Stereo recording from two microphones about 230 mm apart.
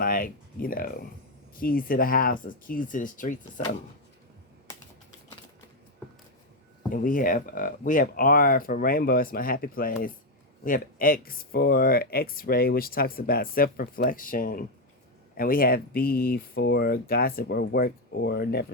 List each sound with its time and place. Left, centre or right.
0.0 s speech: left
6.9 s speech: left